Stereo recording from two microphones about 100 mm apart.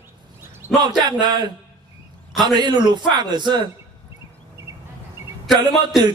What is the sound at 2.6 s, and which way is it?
Speech, 50° right (ahead or behind).